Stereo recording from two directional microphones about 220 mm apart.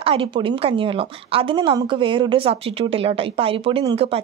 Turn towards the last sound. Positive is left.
turn(degrees=-25)  # may be behind; listen again after turning